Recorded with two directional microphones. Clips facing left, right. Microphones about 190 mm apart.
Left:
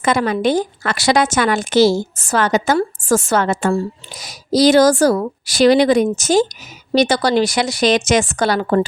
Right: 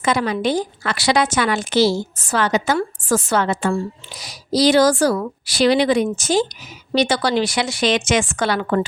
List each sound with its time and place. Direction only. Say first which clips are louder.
0.0 s a woman's voice: left 3 dB; 50° left (ahead or behind)